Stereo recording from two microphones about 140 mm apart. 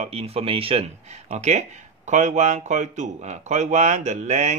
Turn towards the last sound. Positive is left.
turn(degrees=-60)  # may be behind; listen again after turning